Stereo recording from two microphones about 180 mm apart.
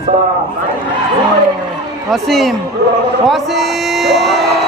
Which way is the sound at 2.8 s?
60° right (ahead or behind).